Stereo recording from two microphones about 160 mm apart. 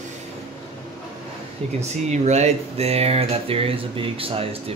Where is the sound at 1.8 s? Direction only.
45° right (ahead or behind).